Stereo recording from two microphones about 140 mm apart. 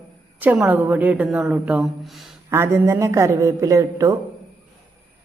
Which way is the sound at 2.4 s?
15° right (ahead or behind).